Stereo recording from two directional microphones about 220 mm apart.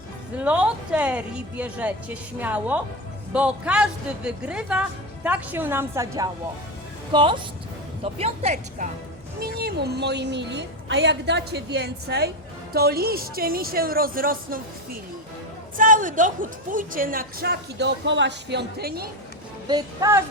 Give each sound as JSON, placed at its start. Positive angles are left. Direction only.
{"t": 0.3, "sound": "a woman's voice", "side_deg": -5}
{"t": 9.4, "sound": "a woman's voice", "side_deg": -45}
{"t": 19.6, "sound": "a woman's voice", "side_deg": -15}